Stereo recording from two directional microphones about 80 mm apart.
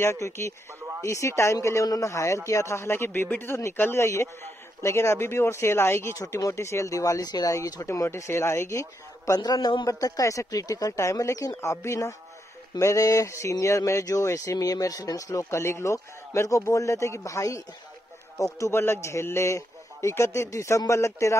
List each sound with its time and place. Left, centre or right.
0.0 s speech: left
6.1 s speech: left
7.5 s speech: left
9.4 s a man's voice: left
9.8 s speech: left